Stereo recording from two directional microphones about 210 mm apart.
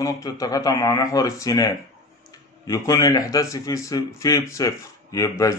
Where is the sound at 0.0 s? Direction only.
15° left (ahead or behind).